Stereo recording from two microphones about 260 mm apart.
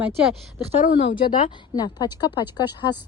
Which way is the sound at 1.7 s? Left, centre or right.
Centre.